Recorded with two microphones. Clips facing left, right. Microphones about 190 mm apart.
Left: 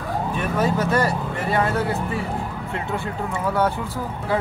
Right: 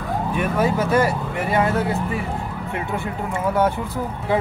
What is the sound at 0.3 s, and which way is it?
Speech, 10° right (ahead or behind).